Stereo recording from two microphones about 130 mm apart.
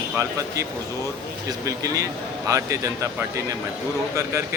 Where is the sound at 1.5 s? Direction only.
25° right (ahead or behind).